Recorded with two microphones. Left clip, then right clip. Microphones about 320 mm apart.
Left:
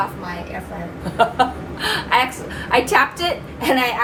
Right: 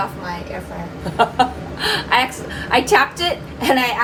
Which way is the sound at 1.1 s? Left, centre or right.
Right.